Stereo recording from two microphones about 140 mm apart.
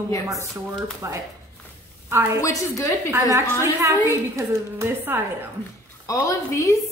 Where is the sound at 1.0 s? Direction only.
20° right (ahead or behind).